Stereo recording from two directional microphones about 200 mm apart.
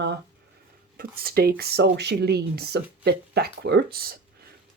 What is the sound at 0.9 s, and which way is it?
Speech, 50° right (ahead or behind).